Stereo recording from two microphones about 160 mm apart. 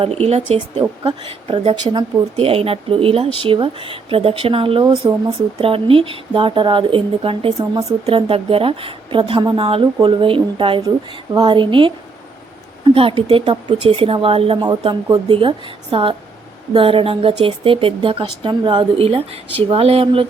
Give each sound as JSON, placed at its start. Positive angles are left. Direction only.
{"t": 0.0, "sound": "speech", "side_deg": -40}